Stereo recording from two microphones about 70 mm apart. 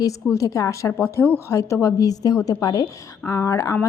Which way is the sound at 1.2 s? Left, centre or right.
Left.